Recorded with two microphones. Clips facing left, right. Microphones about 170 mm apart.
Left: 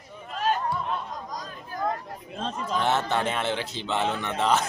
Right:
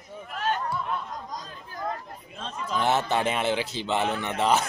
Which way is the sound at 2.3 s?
40° left (ahead or behind).